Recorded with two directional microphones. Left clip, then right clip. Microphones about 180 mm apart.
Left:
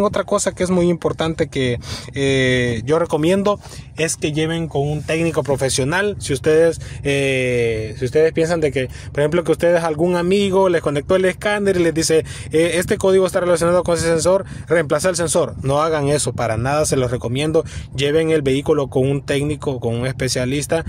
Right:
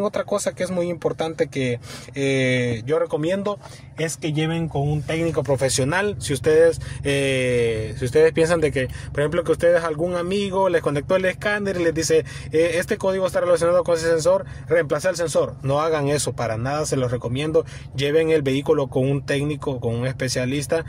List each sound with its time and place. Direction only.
0.0 s speech: 30° left (ahead or behind)